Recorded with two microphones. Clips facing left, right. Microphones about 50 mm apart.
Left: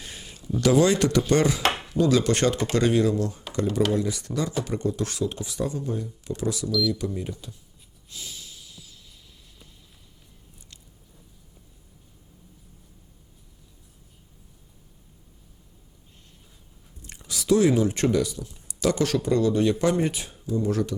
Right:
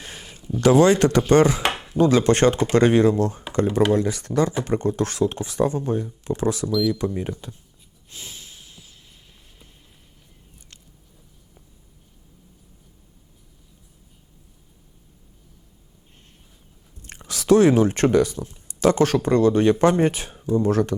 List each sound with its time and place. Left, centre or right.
0.0 s a sound: right
0.6 s speech: right
8.1 s snort: right
17.1 s speech: right